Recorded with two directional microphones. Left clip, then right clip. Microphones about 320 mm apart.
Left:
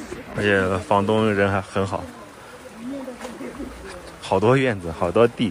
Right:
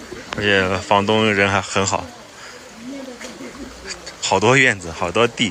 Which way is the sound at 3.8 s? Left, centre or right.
Centre.